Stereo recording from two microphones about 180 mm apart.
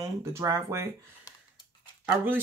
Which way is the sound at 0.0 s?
15° right (ahead or behind).